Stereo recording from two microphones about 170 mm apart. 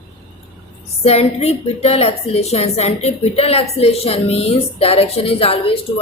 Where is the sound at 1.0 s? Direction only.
40° left (ahead or behind).